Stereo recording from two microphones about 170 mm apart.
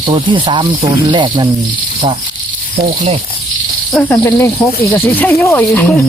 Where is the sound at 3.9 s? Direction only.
5° left (ahead or behind).